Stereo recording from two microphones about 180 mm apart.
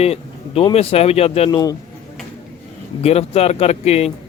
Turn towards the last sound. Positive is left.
turn(degrees=35)  # may be behind; listen again after turning